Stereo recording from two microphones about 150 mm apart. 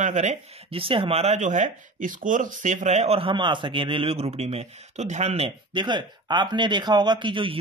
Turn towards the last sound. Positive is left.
turn(degrees=-35)  # may be behind; listen again after turning